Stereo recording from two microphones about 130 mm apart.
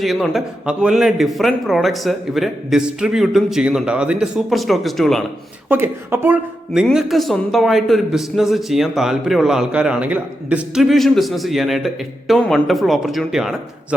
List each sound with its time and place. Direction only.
0.0 s a man's voice: centre (ahead or behind)
5.6 s speech: 15° right (ahead or behind)
6.8 s a man's voice: centre (ahead or behind)
10.8 s a man's voice: centre (ahead or behind)